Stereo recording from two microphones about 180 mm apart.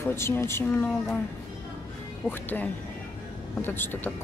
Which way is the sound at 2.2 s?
10° left (ahead or behind).